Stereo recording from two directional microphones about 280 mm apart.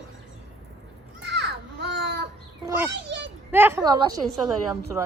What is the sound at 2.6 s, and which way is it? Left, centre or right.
Children playing, centre.